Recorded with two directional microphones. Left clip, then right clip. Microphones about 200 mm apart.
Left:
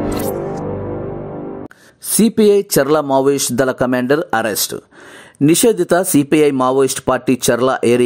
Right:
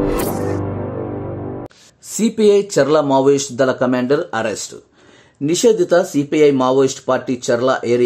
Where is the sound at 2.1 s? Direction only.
45° left (ahead or behind).